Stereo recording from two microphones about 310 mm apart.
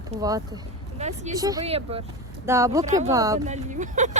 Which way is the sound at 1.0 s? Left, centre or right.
Right.